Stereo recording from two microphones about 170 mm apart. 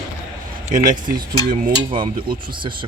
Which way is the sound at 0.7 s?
50° right (ahead or behind).